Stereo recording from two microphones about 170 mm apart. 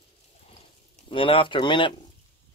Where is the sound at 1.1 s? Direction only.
30° left (ahead or behind).